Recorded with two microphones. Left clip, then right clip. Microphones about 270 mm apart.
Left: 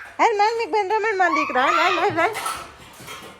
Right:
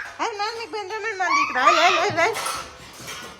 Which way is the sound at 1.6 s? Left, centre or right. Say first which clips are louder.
Right 4 dB; centre.